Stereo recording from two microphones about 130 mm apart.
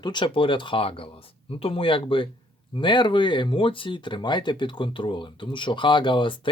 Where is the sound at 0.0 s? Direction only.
35° left (ahead or behind).